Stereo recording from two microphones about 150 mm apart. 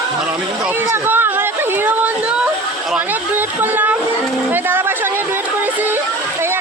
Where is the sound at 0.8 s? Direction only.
15° right (ahead or behind).